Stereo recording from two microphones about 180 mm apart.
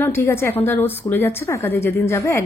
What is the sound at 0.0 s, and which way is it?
A woman's voice, 15° left (ahead or behind).